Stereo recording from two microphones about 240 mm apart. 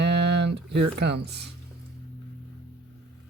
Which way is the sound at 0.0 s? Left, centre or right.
Right.